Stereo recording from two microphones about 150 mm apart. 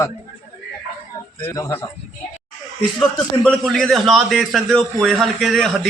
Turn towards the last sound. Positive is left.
turn(degrees=0)  # may be behind; listen again after turning